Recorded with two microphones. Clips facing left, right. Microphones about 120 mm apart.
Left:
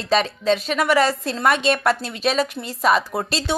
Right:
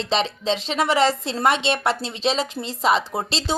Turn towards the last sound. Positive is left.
turn(degrees=-20)  # may be behind; listen again after turning